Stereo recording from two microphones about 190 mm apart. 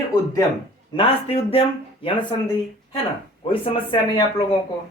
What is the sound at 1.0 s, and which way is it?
Speech, 30° left (ahead or behind).